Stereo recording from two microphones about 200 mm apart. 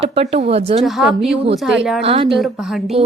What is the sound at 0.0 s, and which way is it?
Speech, 30° right (ahead or behind).